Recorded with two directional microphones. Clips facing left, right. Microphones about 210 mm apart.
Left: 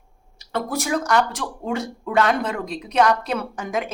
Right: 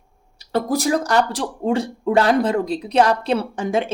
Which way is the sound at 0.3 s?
35° right (ahead or behind).